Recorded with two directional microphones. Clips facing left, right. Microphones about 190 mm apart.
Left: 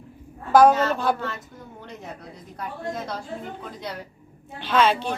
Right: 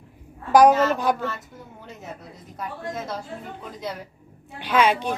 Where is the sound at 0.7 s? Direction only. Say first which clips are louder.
Right 2 dB; 5° right (ahead or behind).